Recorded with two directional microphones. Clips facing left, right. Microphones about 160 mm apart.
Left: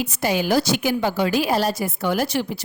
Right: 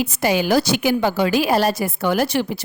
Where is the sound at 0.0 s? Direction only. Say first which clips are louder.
Right 3 dB; 80° right.